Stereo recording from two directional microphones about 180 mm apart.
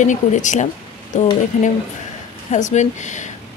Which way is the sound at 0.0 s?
45° left (ahead or behind).